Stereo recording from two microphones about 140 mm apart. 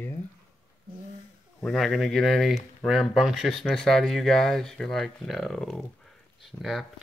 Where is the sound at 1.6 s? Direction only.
Centre (ahead or behind).